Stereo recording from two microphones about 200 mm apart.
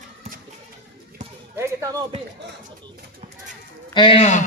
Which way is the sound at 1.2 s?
35° right (ahead or behind).